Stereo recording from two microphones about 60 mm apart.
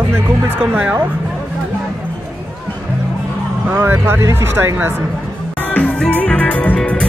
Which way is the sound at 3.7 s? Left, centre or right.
Right.